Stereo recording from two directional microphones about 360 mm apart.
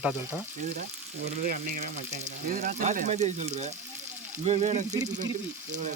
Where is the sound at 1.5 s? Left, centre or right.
Right.